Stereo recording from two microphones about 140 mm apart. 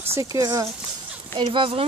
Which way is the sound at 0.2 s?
25° right (ahead or behind).